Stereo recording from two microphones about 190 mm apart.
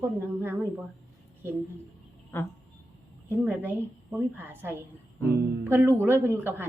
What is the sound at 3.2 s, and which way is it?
A woman's voice, 10° right (ahead or behind).